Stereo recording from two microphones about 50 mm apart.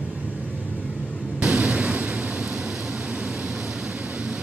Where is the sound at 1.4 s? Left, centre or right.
Right.